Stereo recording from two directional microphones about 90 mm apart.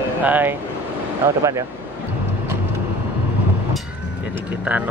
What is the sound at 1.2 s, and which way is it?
Speech, 35° right (ahead or behind).